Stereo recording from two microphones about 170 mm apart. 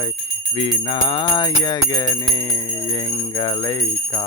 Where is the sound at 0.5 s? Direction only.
35° left (ahead or behind).